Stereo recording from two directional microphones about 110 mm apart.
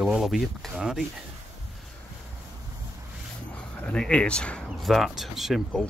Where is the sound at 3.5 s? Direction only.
10° left (ahead or behind).